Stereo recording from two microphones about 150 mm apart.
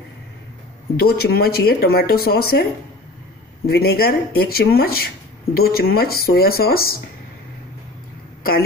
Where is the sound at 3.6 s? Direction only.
90° left.